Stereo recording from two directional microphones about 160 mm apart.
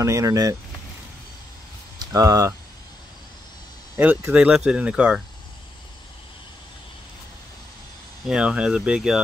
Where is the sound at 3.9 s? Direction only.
15° right (ahead or behind).